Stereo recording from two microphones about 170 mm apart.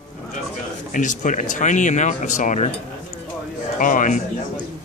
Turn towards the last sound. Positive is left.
turn(degrees=50)  # may be behind; listen again after turning